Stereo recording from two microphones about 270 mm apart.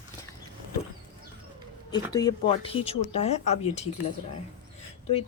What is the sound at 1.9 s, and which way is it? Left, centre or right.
Speech, centre.